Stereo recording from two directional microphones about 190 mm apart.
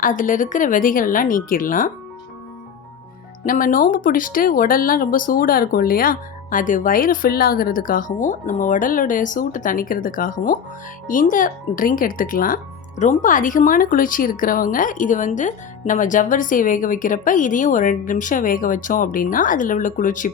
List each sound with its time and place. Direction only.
0.0 s speech: 45° left (ahead or behind)
3.4 s speech: 45° left (ahead or behind)